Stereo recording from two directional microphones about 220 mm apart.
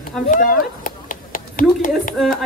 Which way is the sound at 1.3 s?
35° left (ahead or behind).